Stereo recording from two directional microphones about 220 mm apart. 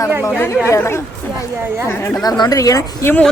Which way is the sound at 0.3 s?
10° left (ahead or behind).